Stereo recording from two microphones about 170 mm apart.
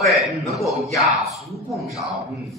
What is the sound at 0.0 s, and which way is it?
Speech, centre (ahead or behind).